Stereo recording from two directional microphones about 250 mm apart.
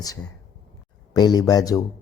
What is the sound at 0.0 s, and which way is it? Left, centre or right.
A man's voice, centre.